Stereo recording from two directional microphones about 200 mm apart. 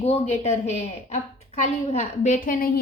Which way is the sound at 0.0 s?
35° left (ahead or behind).